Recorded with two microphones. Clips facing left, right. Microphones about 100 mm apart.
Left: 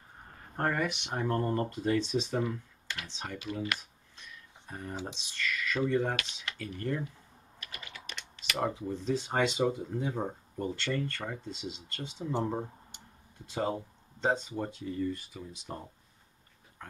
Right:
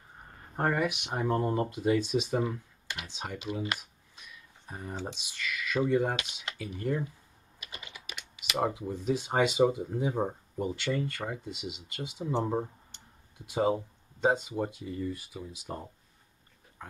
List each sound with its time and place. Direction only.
0.6 s speech: 5° right (ahead or behind)
4.2 s a sound: 10° right (ahead or behind)
5.0 s speech: 10° right (ahead or behind)
7.6 s typing: 15° right (ahead or behind)
8.5 s speech: 10° right (ahead or behind)
12.9 s tick-tock: 15° left (ahead or behind)
13.5 s speech: 10° right (ahead or behind)